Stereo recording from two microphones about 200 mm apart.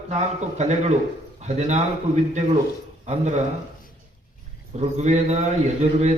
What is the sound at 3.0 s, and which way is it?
Speech, 35° right (ahead or behind).